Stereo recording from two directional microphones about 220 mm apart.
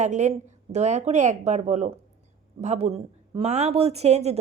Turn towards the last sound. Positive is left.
turn(degrees=-30)  # may be behind; listen again after turning